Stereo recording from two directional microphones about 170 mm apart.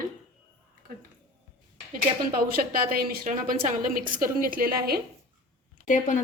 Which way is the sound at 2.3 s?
55° right (ahead or behind).